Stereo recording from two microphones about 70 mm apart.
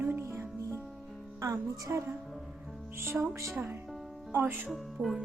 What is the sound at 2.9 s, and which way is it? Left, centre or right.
Music, right.